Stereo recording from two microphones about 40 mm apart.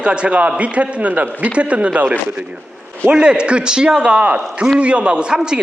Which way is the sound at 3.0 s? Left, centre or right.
Right.